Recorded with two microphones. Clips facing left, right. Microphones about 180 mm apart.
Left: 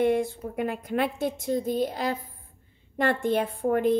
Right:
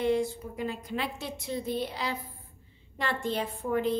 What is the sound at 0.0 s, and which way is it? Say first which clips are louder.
A woman's voice: left 4 dB; 55° left (ahead or behind).